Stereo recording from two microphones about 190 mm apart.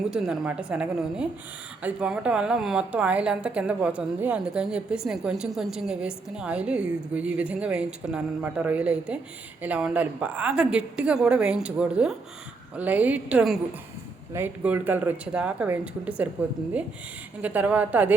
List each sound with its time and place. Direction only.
0.0 s a woman's voice: 5° right (ahead or behind)
17.4 s speech: 10° right (ahead or behind)